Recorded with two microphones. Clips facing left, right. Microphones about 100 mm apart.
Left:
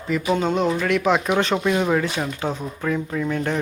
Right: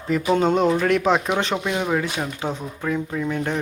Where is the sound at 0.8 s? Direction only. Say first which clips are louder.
Right 1 dB; 40° right (ahead or behind).